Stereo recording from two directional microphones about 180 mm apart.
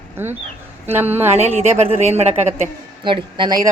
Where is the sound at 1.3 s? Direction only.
40° right (ahead or behind).